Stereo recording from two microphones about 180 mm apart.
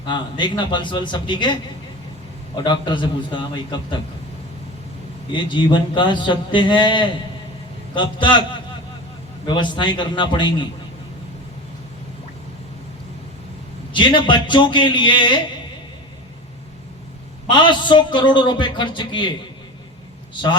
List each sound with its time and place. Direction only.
0.0 s a man's voice: 25° left (ahead or behind)
2.6 s a man's voice: 25° left (ahead or behind)
5.3 s a man's voice: 25° left (ahead or behind)
9.5 s a man's voice: 25° left (ahead or behind)
13.9 s a man's voice: 25° left (ahead or behind)
17.5 s a man's voice: 25° left (ahead or behind)
20.3 s a man's voice: 25° left (ahead or behind)